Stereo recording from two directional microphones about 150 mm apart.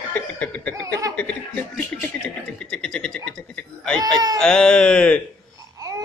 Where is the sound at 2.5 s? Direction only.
5° left (ahead or behind).